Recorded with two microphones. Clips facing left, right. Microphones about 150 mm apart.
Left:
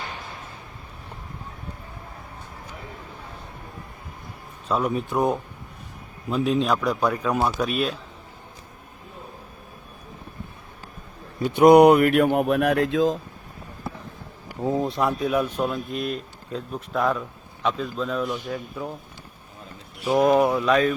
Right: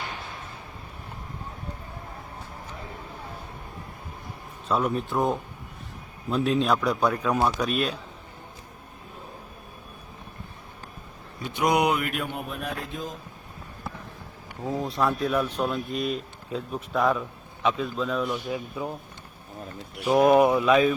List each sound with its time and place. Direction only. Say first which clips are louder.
4.7 s speech: left 1 dB; 5° left (ahead or behind)
11.5 s speech: left 11 dB; 55° left (ahead or behind); by 13.1 s 90° left
14.6 s speech: left 5 dB; 30° left (ahead or behind)
15.2 s speech: left 2 dB; 10° left (ahead or behind); by 18.9 s 10° right (ahead or behind)
20.1 s speech: even; 10° right (ahead or behind)